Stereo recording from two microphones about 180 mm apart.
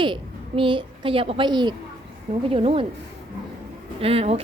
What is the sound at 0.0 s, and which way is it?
A woman's voice, 25° right (ahead or behind).